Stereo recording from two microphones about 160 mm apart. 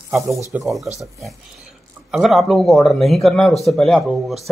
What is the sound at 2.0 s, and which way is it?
Speech, centre (ahead or behind).